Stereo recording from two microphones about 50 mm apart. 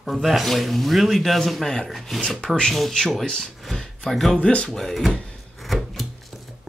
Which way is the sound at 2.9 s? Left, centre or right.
Centre.